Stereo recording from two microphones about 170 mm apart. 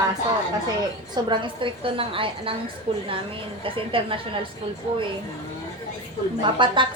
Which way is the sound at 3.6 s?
30° right (ahead or behind).